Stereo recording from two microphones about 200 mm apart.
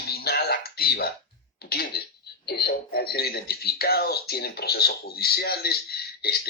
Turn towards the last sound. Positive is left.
turn(degrees=50)  # may be behind; listen again after turning